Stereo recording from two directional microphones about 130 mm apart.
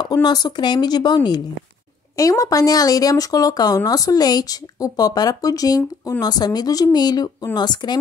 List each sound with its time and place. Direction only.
0.0 s speech: 30° left (ahead or behind)